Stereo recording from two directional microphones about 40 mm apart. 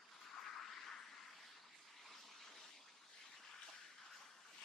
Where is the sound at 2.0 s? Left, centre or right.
Centre.